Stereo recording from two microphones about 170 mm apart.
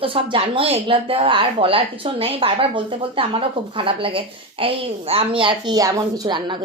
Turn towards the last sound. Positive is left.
turn(degrees=-25)  # may be behind; listen again after turning